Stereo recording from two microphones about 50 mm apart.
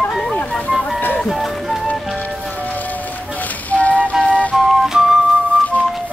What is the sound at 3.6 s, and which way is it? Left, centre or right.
Music, left.